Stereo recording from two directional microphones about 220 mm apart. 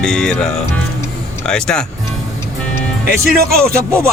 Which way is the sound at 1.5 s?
5° left (ahead or behind).